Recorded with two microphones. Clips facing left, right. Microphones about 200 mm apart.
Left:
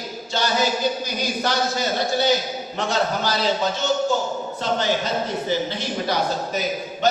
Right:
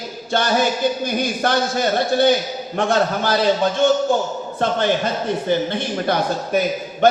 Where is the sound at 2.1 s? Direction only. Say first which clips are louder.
Right 5 dB; 55° right (ahead or behind).